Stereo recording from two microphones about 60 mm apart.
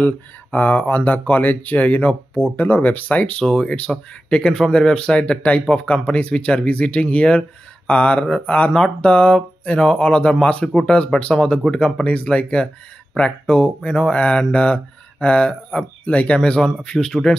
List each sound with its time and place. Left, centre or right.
0.0 s speech: left; by 17.4 s centre